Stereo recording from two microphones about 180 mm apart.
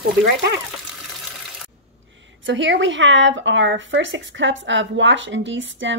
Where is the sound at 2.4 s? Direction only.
90° right.